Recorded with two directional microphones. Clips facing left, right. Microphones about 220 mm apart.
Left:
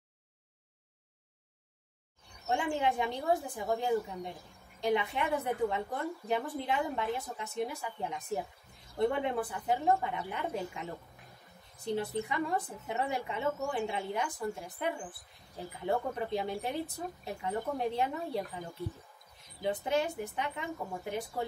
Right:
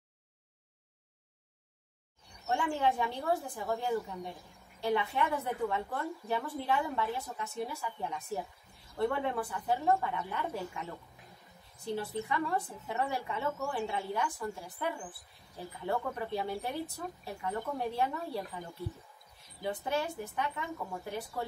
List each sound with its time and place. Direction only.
2.4 s a woman's voice: 15° left (ahead or behind)
19.6 s a woman's voice: 20° left (ahead or behind)